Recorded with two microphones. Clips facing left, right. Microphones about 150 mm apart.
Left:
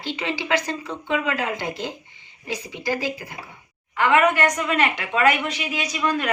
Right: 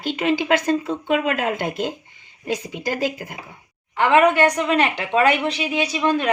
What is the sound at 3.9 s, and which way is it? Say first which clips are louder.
A woman's voice: right 3 dB; 30° right (ahead or behind).